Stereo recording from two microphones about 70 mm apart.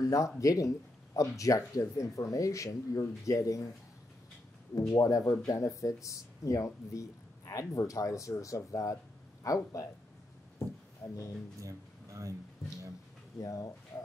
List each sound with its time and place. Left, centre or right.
0.0 s a sound: left
0.4 s speech: left
4.7 s speech: left
11.0 s speech: left
11.6 s speech: right
13.4 s speech: left